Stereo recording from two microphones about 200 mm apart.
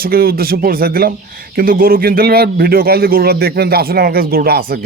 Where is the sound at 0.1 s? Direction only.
50° right (ahead or behind).